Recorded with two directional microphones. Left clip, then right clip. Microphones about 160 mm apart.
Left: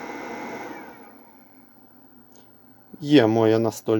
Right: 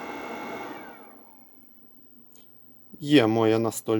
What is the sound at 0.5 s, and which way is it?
Sewing machine, 5° right (ahead or behind).